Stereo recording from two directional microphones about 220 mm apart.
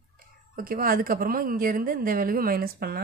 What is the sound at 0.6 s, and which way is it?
A woman's voice, 40° right (ahead or behind).